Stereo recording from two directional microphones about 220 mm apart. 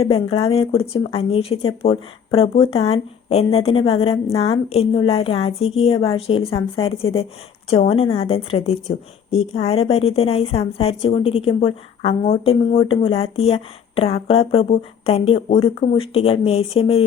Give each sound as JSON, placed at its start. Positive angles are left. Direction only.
{"t": 0.0, "sound": "a woman's voice", "side_deg": 25}